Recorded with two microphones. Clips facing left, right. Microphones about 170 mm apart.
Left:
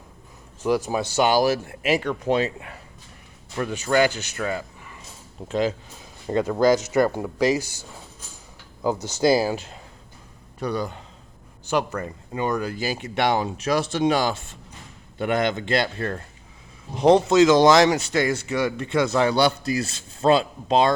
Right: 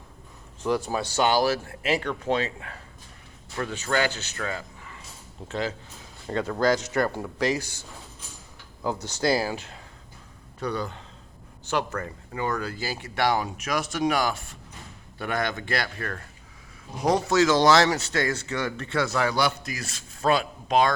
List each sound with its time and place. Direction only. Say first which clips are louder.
0.6 s speech: left 3 dB; 10° left (ahead or behind)
9.2 s speech: left 5 dB; 15° left (ahead or behind)
10.6 s speech: left 3 dB; 10° left (ahead or behind); by 20.9 s 30° left (ahead or behind)